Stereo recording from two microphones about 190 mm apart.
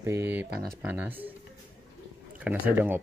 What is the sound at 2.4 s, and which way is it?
Speech, 10° right (ahead or behind).